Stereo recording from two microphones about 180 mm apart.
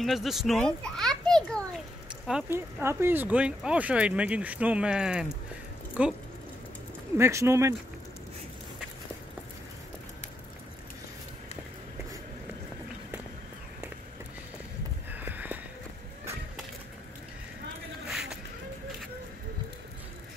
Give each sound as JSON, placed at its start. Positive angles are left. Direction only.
{"t": 0.0, "sound": "a child's voice", "side_deg": 0}
{"t": 2.2, "sound": "speech", "side_deg": -10}
{"t": 7.2, "sound": "speech", "side_deg": -15}
{"t": 15.0, "sound": "a sound", "side_deg": -10}